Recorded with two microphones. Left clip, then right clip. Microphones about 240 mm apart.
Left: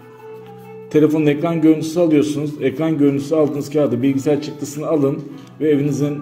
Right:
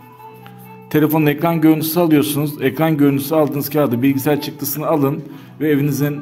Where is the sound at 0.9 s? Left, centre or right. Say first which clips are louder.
Left 1 dB; right.